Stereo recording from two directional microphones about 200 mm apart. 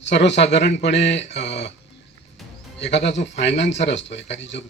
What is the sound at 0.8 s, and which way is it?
Speech, 60° left (ahead or behind).